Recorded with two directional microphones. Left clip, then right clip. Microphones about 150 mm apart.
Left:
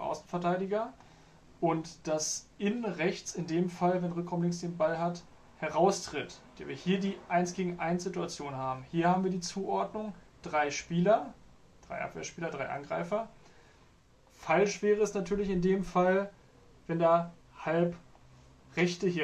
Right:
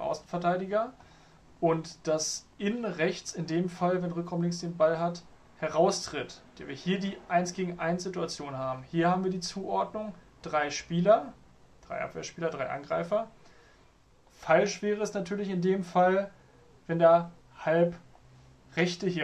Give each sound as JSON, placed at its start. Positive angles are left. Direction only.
{"t": 0.0, "sound": "speech", "side_deg": -45}
{"t": 14.4, "sound": "speech", "side_deg": -45}